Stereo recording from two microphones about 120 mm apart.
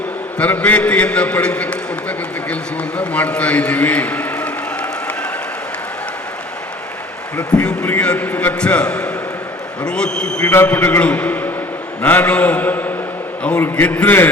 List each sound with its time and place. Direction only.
0.3 s a man's voice: 10° left (ahead or behind)
3.0 s a sound: 10° left (ahead or behind)
7.3 s a man's voice: 10° left (ahead or behind)